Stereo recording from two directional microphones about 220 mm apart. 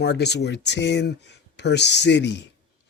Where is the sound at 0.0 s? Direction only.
50° left (ahead or behind).